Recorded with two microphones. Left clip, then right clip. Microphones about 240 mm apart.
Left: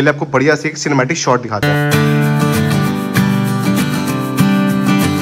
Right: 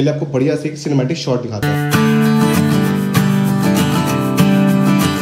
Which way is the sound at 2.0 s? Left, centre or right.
Centre.